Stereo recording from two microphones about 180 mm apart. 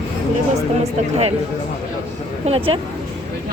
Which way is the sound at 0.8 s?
35° right (ahead or behind).